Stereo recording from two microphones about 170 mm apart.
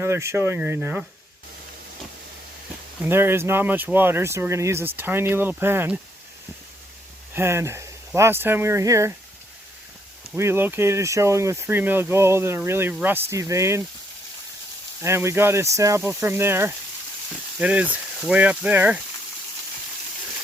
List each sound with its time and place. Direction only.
0.0 s speech: 15° right (ahead or behind)
3.0 s speech: 10° right (ahead or behind)
7.3 s speech: 15° right (ahead or behind)
10.3 s speech: 15° right (ahead or behind)
15.0 s speech: 15° right (ahead or behind)